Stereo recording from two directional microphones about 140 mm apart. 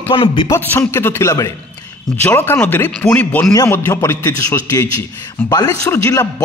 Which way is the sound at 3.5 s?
20° left (ahead or behind).